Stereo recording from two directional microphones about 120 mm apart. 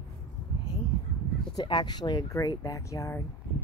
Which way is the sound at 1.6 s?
35° left (ahead or behind).